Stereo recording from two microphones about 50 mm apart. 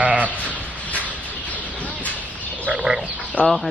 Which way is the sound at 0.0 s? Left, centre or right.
Right.